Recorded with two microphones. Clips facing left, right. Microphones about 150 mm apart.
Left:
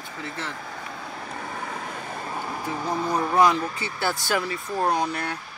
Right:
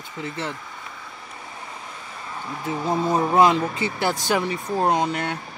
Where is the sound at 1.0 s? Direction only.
65° left (ahead or behind).